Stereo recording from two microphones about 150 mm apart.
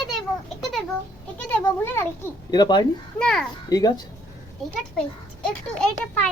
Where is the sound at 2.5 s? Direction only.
30° left (ahead or behind).